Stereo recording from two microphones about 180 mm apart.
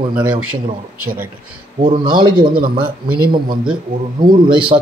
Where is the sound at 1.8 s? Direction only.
25° right (ahead or behind).